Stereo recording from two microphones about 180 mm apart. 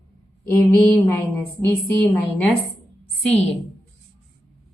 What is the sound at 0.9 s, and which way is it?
Speech, 10° left (ahead or behind).